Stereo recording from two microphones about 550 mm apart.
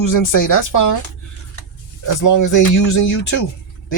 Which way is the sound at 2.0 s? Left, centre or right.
Left.